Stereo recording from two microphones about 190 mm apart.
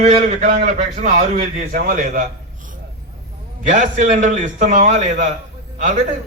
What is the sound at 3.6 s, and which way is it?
A man's voice, 40° right (ahead or behind).